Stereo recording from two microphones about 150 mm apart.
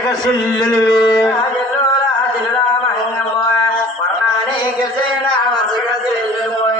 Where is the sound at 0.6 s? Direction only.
25° left (ahead or behind).